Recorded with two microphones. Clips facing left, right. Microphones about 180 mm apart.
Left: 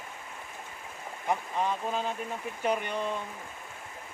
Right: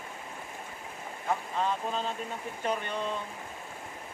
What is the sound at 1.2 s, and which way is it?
Speech, 10° left (ahead or behind).